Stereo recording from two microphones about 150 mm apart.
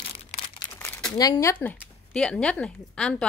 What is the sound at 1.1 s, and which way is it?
Speech, 25° left (ahead or behind).